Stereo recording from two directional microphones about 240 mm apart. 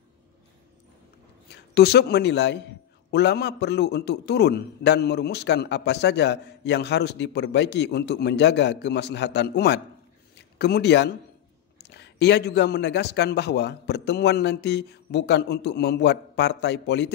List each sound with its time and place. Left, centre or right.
1.5 s a man's voice: left